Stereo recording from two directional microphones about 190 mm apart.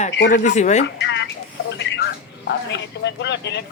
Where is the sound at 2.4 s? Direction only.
65° left (ahead or behind).